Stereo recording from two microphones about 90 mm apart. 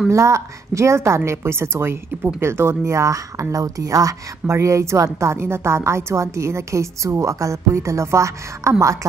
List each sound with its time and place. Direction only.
0.1 s a woman's voice: 35° right (ahead or behind)